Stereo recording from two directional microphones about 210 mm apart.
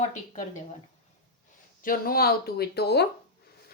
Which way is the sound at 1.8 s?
45° left (ahead or behind).